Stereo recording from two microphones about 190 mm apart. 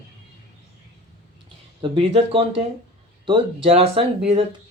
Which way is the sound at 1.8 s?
25° right (ahead or behind).